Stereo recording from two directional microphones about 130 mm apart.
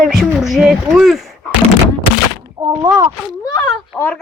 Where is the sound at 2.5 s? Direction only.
30° right (ahead or behind).